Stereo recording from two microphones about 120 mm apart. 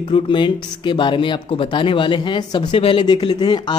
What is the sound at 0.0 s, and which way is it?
Speech, 45° left (ahead or behind).